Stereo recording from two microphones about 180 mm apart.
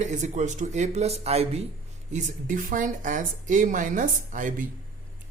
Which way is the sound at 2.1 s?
45° right (ahead or behind).